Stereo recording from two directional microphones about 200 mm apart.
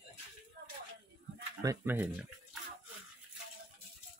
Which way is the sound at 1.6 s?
15° right (ahead or behind).